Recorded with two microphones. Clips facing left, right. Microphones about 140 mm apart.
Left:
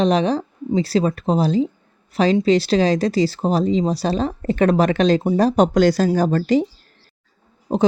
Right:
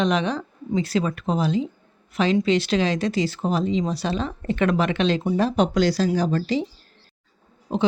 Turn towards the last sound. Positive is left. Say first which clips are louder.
# left 5 dB
turn(degrees=40)  # may be behind; listen again after turning